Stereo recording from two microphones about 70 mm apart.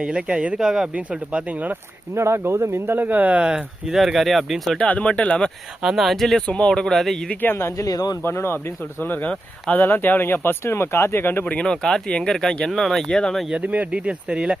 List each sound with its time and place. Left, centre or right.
0.0 s speech: centre
1.1 s speech: centre
2.1 s speech: right; by 4.8 s centre
4.8 s speech: centre
5.8 s speech: centre
6.5 s speech: centre
7.4 s speech: left
7.8 s speech: left
8.2 s speech: left
11.5 s speech: centre
13.5 s speech: centre